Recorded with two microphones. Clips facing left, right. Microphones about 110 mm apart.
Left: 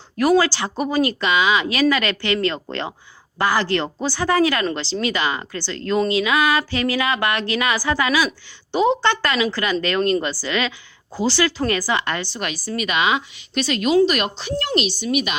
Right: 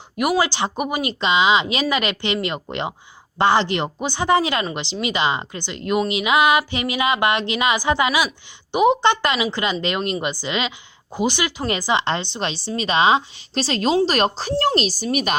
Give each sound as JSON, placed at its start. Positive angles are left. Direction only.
{"t": 0.2, "sound": "speech", "side_deg": -15}